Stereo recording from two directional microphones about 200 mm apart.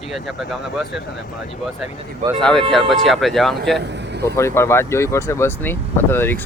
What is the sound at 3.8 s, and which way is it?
Vehicle, 60° right (ahead or behind).